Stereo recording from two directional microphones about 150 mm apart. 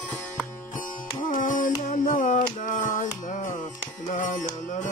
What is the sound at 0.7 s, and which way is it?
Music, 60° left (ahead or behind).